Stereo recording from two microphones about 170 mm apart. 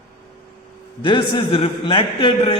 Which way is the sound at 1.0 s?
30° left (ahead or behind).